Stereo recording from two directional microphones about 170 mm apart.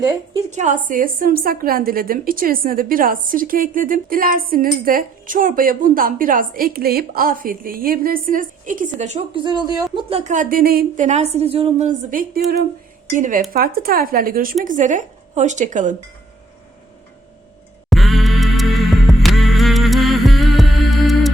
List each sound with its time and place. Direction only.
0.5 s a woman's voice: 45° right (ahead or behind)
9.4 s speech: 25° right (ahead or behind)
9.9 s speech: 35° right (ahead or behind); by 11.0 s 60° right (ahead or behind)
11.0 s a woman's voice: 40° right (ahead or behind)
17.8 s music: centre (ahead or behind)